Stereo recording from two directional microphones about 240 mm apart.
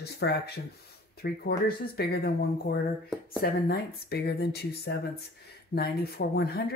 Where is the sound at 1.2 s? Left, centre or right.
Left.